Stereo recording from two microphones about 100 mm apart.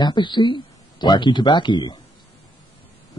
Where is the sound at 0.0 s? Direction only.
50° left (ahead or behind).